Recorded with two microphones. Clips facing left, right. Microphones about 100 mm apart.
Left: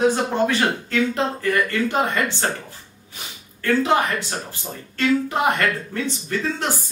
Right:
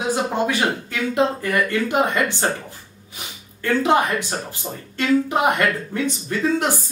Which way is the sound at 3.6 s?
20° right (ahead or behind).